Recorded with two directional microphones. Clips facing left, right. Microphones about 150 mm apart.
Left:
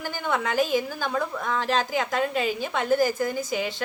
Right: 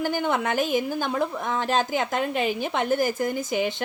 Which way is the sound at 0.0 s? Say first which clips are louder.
Right 3 dB; 20° right (ahead or behind).